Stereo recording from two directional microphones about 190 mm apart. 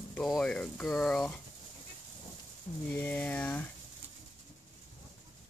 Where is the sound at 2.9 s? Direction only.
10° left (ahead or behind).